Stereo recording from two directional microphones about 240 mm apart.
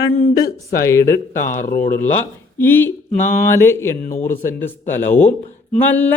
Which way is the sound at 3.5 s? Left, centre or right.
Centre.